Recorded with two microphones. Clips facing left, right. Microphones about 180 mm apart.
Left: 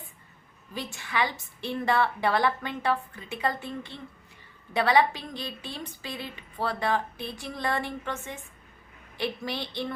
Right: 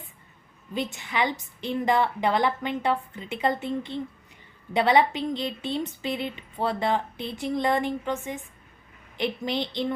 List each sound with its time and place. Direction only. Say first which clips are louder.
0.7 s speech: right 4 dB; 20° right (ahead or behind)